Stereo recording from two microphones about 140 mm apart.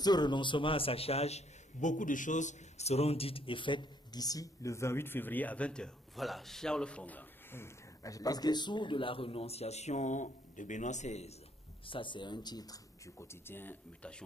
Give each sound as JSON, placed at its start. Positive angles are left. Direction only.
{"t": 0.0, "sound": "a man's voice", "side_deg": 30}
{"t": 11.8, "sound": "speech", "side_deg": 35}